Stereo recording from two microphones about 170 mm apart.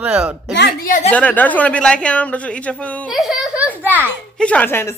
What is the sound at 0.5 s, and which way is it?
Speech, 85° left.